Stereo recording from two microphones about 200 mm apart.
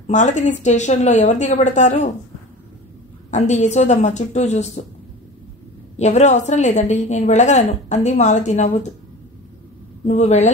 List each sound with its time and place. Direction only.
0.0 s a woman's voice: 35° left (ahead or behind)
3.3 s a woman's voice: 35° left (ahead or behind)
5.9 s a woman's voice: 35° left (ahead or behind)
10.0 s a woman's voice: 35° left (ahead or behind)